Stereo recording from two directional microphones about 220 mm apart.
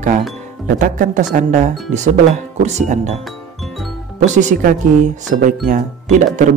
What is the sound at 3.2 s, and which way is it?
Music, centre (ahead or behind).